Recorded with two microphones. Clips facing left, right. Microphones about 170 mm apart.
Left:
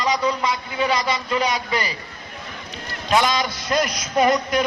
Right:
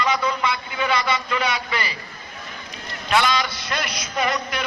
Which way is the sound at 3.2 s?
40° left (ahead or behind).